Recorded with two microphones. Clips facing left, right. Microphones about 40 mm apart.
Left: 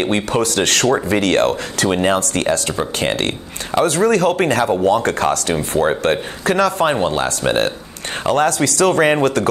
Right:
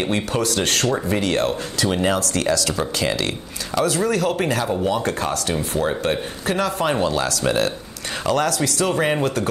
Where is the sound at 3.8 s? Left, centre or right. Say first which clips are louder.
Left 6 dB; left.